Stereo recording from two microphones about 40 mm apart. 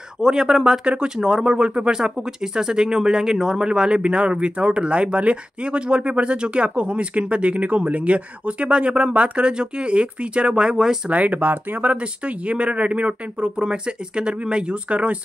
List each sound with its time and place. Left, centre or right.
0.2 s speech: centre
11.1 s speech: right
12.0 s speech: right
13.6 s speech: right